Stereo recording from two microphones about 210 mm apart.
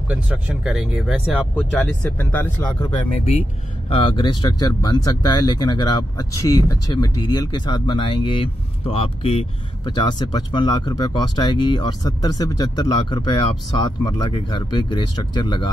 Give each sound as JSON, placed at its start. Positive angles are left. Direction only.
{"t": 0.7, "sound": "speech", "side_deg": 0}
{"t": 3.9, "sound": "speech", "side_deg": 25}